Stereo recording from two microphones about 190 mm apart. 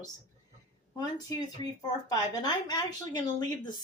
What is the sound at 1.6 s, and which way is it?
A woman's voice, 20° left (ahead or behind).